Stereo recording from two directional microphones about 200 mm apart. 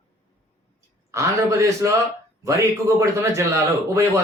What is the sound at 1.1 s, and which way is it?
Speech, 15° right (ahead or behind).